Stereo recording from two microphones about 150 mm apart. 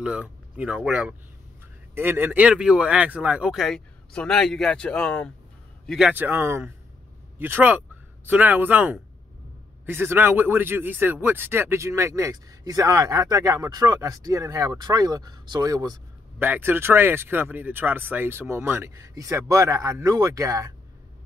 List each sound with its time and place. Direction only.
0.0 s a man's voice: 10° right (ahead or behind)
6.1 s speech: 15° right (ahead or behind)
16.3 s speech: 15° right (ahead or behind)